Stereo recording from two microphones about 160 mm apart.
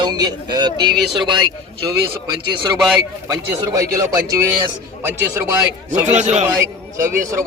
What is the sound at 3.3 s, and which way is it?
A man's voice, 20° right (ahead or behind).